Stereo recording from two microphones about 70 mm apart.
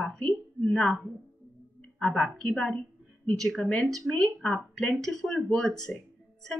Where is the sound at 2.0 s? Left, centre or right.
Centre.